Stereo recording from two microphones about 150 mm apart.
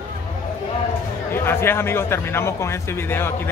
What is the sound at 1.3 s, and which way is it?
A man's voice, 15° left (ahead or behind).